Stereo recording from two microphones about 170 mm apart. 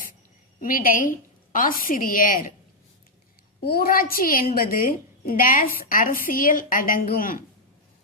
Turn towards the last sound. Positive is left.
turn(degrees=55)  # may be behind; listen again after turning